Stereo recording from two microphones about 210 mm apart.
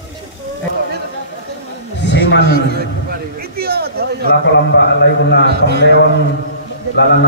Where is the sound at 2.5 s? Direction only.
50° right (ahead or behind).